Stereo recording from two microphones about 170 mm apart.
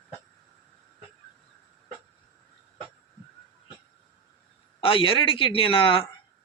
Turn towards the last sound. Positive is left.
turn(degrees=30)  # may be behind; listen again after turning